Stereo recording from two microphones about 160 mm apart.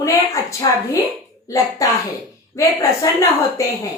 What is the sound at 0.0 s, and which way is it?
A woman's voice, 20° left (ahead or behind).